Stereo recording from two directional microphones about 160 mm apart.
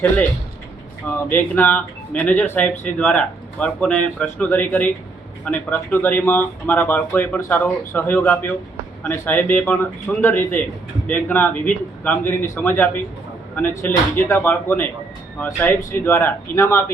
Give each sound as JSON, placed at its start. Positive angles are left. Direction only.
{"t": 1.0, "sound": "speech", "side_deg": 10}